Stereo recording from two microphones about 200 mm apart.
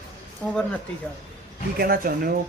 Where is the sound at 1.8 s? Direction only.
45° right (ahead or behind).